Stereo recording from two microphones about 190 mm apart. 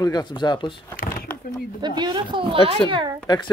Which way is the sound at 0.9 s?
50° left (ahead or behind).